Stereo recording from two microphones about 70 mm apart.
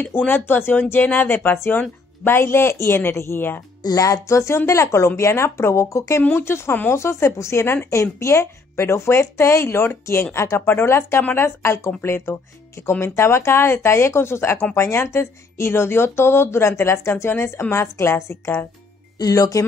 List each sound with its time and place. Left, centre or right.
0.0 s speech: left
3.8 s speech: left
19.1 s speech: left